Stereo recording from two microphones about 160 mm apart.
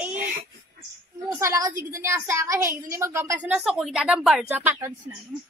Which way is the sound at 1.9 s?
15° right (ahead or behind).